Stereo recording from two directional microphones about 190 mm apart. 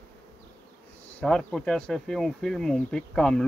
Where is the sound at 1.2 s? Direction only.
5° left (ahead or behind).